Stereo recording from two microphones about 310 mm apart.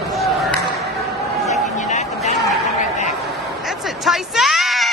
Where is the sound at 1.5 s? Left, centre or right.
Left.